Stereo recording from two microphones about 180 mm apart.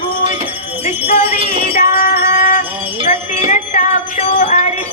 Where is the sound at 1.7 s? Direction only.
50° left (ahead or behind).